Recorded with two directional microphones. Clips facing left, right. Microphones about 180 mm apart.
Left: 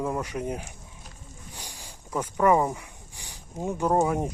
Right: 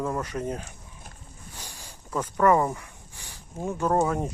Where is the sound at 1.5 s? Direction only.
15° left (ahead or behind).